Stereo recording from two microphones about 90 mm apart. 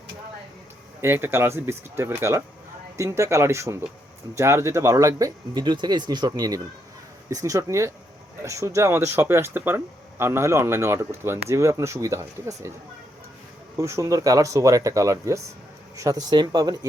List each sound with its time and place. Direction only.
1.0 s speech: 25° right (ahead or behind)
13.7 s speech: 30° right (ahead or behind)
16.3 s speech: 50° right (ahead or behind)